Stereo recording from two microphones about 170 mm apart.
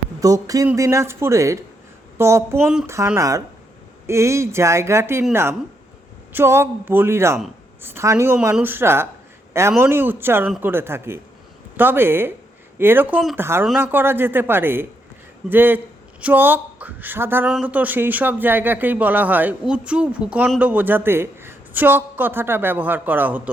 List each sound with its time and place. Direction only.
0.2 s music: 20° right (ahead or behind)
0.8 s speech: 15° right (ahead or behind)
3.2 s music: 20° right (ahead or behind)
4.0 s speech: 15° right (ahead or behind)